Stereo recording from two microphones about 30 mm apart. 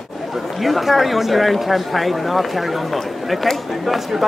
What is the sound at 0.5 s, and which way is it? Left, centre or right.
Speech, centre.